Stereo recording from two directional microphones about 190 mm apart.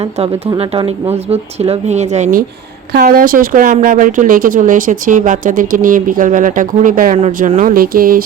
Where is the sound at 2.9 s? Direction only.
50° right (ahead or behind).